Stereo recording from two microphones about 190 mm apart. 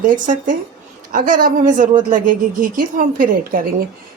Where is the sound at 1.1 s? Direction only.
45° right (ahead or behind).